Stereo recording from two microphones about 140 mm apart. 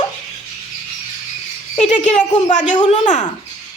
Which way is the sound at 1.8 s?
55° left (ahead or behind).